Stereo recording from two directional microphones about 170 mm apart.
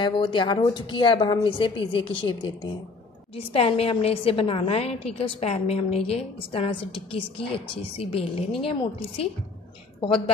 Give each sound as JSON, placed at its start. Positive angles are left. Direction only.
{"t": 0.0, "sound": "a woman's voice", "side_deg": 30}